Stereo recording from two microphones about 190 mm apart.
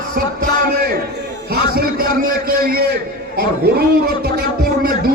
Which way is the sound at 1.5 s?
50° right (ahead or behind).